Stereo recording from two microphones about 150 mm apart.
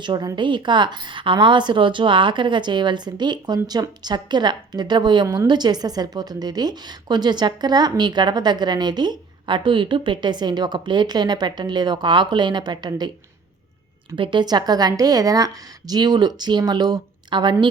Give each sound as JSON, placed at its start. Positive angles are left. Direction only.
{"t": 0.0, "sound": "a woman's voice", "side_deg": -30}
{"t": 14.2, "sound": "a woman's voice", "side_deg": -30}